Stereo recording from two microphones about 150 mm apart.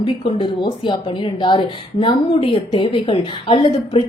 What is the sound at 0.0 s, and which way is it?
A woman's voice, 30° left (ahead or behind).